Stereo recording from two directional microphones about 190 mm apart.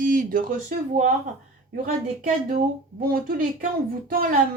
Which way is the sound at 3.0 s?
50° right (ahead or behind).